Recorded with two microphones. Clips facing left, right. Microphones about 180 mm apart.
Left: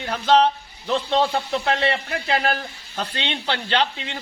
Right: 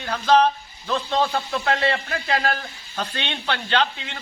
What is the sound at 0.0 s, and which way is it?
Speech, 20° left (ahead or behind).